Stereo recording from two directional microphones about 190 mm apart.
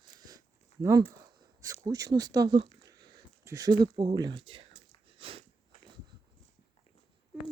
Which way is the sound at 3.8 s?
25° right (ahead or behind).